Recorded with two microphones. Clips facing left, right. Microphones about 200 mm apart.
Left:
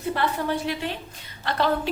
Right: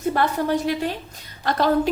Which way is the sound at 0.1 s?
45° right (ahead or behind).